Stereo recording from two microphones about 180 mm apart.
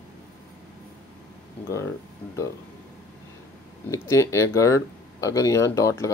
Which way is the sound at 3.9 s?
15° left (ahead or behind).